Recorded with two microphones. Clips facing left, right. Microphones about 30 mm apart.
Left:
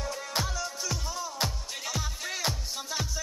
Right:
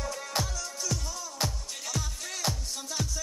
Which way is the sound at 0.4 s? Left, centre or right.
Centre.